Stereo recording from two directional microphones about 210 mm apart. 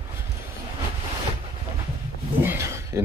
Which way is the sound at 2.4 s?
10° right (ahead or behind).